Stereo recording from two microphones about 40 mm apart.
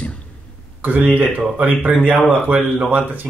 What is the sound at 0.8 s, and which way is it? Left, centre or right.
Speech, right.